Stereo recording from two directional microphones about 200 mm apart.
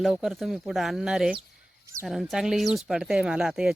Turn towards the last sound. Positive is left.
turn(degrees=-5)  # may be behind; listen again after turning